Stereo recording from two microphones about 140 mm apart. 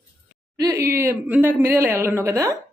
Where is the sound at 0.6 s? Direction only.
25° right (ahead or behind).